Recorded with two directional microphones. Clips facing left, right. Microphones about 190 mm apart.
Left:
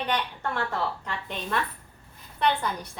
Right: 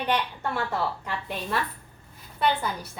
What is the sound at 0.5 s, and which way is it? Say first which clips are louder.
A woman's voice: right 1 dB; 5° right (ahead or behind).